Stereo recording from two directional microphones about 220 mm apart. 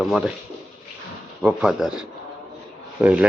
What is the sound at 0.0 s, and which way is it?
Speech, centre (ahead or behind).